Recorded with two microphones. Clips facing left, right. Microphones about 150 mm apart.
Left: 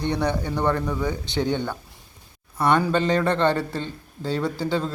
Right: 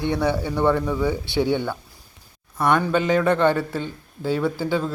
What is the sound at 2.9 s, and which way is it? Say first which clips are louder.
A man's voice: right 2 dB; 5° right (ahead or behind).